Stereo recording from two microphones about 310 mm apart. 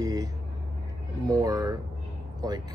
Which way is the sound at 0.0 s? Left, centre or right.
Centre.